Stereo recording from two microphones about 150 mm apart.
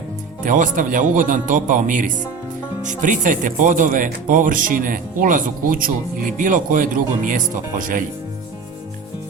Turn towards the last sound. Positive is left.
turn(degrees=-60)  # may be behind; listen again after turning